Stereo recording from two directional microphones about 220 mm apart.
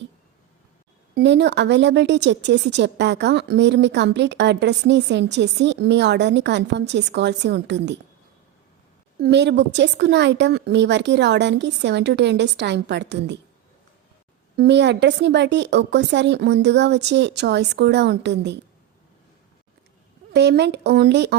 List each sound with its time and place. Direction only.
1.1 s a woman's voice: 50° right (ahead or behind)
9.2 s a woman's voice: 50° right (ahead or behind)
14.5 s a woman's voice: 50° right (ahead or behind)
20.3 s a woman's voice: 50° right (ahead or behind)